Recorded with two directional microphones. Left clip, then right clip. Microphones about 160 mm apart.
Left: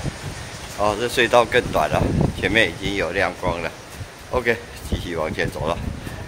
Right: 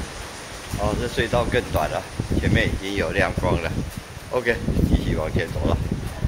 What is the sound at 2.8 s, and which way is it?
Speech, 10° left (ahead or behind).